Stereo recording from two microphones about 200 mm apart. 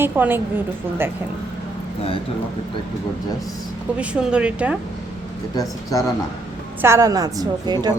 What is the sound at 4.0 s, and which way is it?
Speech, 5° right (ahead or behind).